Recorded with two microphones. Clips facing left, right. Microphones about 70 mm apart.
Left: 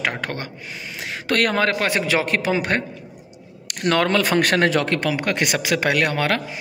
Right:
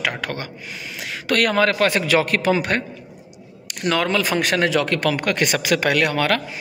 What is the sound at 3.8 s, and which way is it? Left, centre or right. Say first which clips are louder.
Speech: left 1 dB; left.